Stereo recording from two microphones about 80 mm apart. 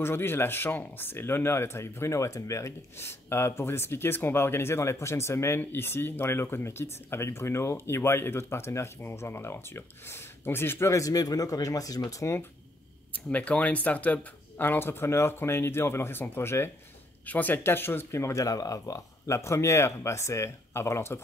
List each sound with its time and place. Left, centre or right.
0.0 s speech: left
10.9 s speech: left
13.3 s speech: centre; by 21.2 s left